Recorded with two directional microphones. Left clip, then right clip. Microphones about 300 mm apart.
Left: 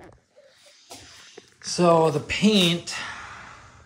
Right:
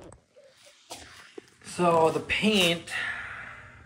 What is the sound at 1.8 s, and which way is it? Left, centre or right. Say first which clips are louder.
Speech: left 4 dB; left.